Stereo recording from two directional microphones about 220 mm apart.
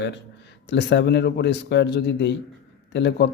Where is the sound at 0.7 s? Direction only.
50° left (ahead or behind).